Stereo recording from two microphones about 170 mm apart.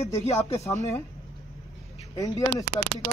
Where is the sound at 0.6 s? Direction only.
20° left (ahead or behind).